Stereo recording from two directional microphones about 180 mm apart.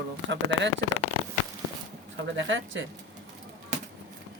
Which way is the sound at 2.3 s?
90° right.